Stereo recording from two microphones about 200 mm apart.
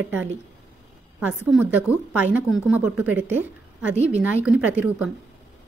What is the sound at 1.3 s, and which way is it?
A woman's voice, 5° right (ahead or behind).